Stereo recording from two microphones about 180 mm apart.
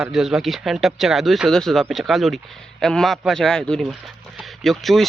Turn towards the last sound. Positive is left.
turn(degrees=0)  # may be behind; listen again after turning